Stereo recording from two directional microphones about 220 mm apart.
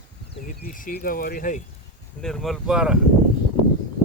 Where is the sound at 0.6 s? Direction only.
40° left (ahead or behind).